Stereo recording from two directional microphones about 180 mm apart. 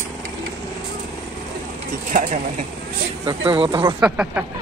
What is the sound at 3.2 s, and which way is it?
Speech, 25° right (ahead or behind).